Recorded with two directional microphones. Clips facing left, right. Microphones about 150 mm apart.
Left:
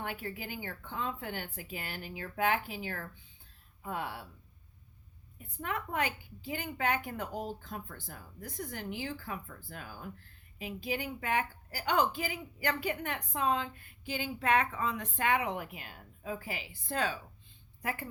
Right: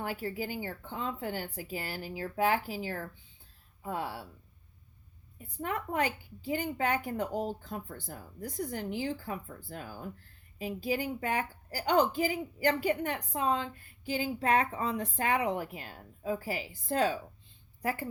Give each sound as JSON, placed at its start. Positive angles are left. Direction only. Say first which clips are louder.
{"t": 0.0, "sound": "a woman's voice", "louder": "right 4 dB", "side_deg": -35}
{"t": 5.4, "sound": "a woman's voice", "louder": "right 2 dB", "side_deg": -35}